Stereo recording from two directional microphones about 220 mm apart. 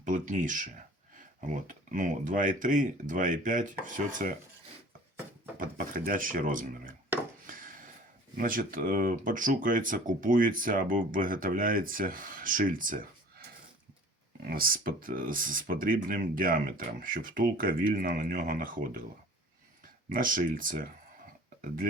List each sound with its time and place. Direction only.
0.0 s speech: 35° right (ahead or behind)
5.5 s speech: 40° right (ahead or behind)
7.4 s a sound: 40° right (ahead or behind)
8.4 s speech: 40° right (ahead or behind)
14.4 s speech: 40° right (ahead or behind)
20.1 s speech: 40° right (ahead or behind)